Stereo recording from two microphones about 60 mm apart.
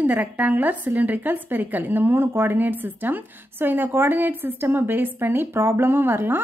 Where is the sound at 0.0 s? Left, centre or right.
Right.